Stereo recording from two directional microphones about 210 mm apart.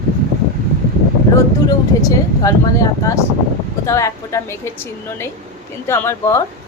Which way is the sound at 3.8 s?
15° left (ahead or behind).